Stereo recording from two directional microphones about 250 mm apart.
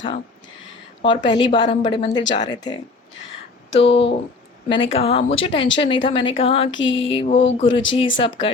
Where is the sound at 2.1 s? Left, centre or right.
Left.